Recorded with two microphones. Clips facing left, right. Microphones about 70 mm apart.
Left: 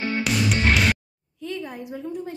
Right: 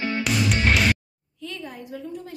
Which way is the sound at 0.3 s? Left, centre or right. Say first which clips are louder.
Even; centre.